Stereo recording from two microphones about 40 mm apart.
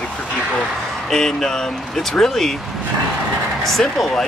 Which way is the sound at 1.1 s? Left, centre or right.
Centre.